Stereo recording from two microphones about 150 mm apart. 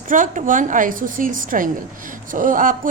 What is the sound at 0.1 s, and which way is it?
A woman's voice, 60° right (ahead or behind).